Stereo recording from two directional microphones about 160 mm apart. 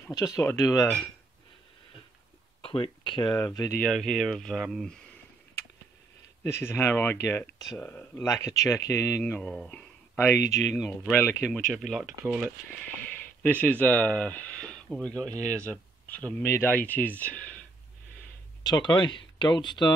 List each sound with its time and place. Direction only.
0.2 s speech: 20° left (ahead or behind)
2.6 s speech: 30° left (ahead or behind)
3.3 s speech: 20° left (ahead or behind)
3.8 s speech: 5° left (ahead or behind)
6.6 s speech: 15° left (ahead or behind)
9.2 s speech: 5° left (ahead or behind)
11.6 s speech: centre (ahead or behind)
13.0 s a sound: 10° left (ahead or behind)
14.9 s speech: 5° left (ahead or behind)
18.6 s speech: 25° left (ahead or behind)